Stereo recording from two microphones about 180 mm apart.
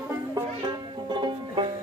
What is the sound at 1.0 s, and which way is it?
Music, 25° right (ahead or behind).